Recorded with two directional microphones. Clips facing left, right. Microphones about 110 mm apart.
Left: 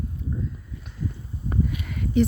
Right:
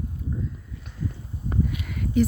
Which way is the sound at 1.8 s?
Centre (ahead or behind).